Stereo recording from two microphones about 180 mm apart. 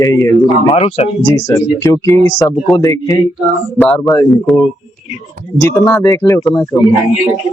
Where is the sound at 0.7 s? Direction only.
35° left (ahead or behind).